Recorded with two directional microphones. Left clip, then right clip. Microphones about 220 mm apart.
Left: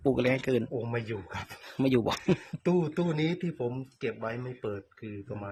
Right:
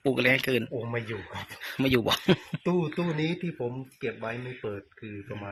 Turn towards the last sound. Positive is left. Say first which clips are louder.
# right 1 dB
turn(degrees=10)  # may be behind; listen again after turning